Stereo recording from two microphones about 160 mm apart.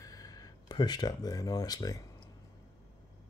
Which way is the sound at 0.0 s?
20° left (ahead or behind).